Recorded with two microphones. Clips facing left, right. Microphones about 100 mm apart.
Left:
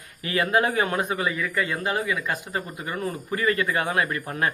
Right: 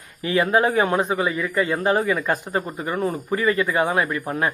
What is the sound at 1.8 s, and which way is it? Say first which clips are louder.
Speech: right 6 dB; 35° right (ahead or behind).